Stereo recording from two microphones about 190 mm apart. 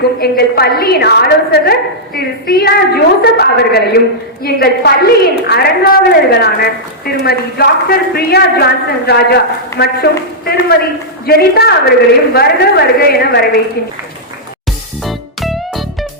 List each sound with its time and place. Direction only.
0.2 s a woman's voice: 55° left (ahead or behind)
15.0 s music: centre (ahead or behind)